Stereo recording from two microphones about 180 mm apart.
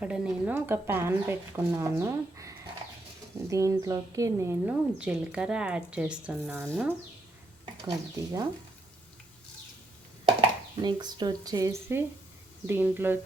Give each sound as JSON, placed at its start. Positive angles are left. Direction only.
{"t": 0.0, "sound": "a woman's voice", "side_deg": -5}
{"t": 7.6, "sound": "speech", "side_deg": -20}
{"t": 10.8, "sound": "a woman's voice", "side_deg": -25}